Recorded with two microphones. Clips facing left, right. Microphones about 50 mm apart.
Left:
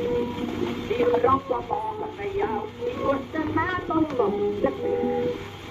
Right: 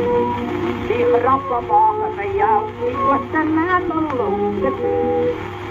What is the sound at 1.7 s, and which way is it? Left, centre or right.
Speech, right.